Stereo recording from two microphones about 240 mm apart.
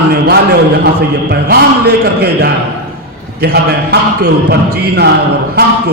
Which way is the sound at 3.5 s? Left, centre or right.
Right.